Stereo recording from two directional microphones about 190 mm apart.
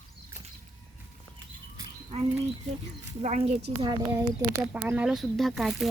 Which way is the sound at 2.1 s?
35° right (ahead or behind).